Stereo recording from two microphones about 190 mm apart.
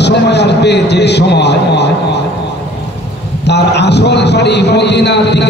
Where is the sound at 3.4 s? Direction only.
60° left (ahead or behind).